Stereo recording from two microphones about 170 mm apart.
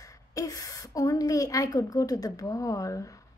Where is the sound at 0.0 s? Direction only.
20° left (ahead or behind).